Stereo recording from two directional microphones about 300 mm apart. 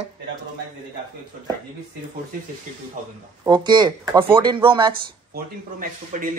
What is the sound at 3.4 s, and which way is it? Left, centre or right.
A man's voice, centre.